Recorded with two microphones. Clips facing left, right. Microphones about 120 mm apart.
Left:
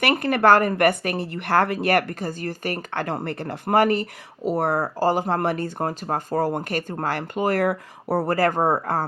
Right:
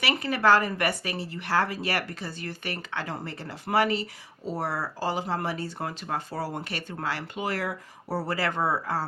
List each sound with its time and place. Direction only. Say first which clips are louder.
0.0 s a woman's voice: left 6 dB; 55° left (ahead or behind)